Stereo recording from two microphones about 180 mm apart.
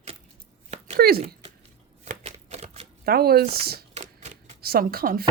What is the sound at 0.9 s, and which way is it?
Speech, 60° right (ahead or behind).